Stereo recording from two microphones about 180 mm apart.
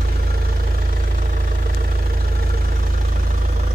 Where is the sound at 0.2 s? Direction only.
55° right (ahead or behind).